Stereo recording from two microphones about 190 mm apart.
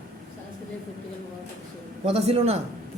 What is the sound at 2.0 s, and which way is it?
Speech, 35° right (ahead or behind).